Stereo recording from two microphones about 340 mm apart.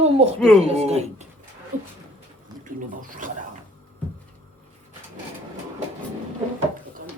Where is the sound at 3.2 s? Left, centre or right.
Right.